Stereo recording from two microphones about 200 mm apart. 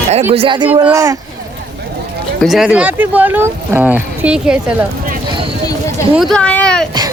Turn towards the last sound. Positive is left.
turn(degrees=5)  # may be behind; listen again after turning